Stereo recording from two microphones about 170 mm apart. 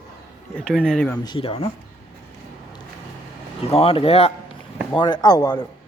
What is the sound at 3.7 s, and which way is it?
Speech, 35° left (ahead or behind).